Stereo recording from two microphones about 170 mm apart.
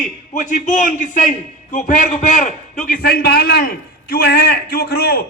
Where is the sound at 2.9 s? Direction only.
60° left (ahead or behind).